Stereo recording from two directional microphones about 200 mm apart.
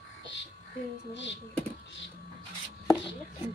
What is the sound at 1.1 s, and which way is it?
Speech, 65° left (ahead or behind).